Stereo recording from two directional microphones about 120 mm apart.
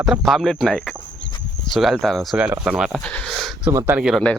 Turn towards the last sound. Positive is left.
turn(degrees=-5)  # may be behind; listen again after turning